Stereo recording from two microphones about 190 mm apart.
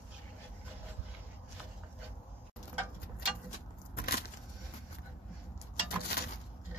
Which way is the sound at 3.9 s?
55° left (ahead or behind).